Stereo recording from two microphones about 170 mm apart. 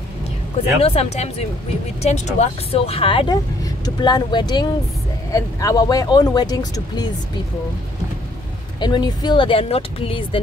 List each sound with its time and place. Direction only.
0.7 s speech: 35° left (ahead or behind)
8.7 s speech: 25° left (ahead or behind)